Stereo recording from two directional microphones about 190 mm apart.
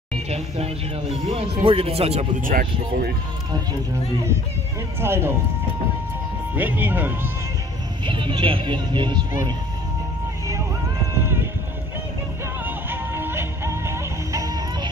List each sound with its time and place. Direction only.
1.3 s speech: 30° right (ahead or behind)
2.5 s speech: 50° right (ahead or behind)
5.0 s speech: 15° right (ahead or behind)
6.5 s speech: 10° right (ahead or behind)
8.0 s speech: 25° right (ahead or behind)
12.6 s music: 10° right (ahead or behind)